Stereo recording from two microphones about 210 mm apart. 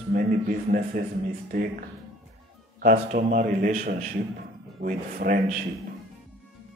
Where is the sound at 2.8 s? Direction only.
40° right (ahead or behind).